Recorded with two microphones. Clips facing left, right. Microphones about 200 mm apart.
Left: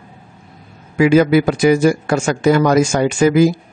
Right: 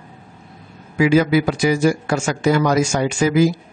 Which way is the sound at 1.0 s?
55° left (ahead or behind).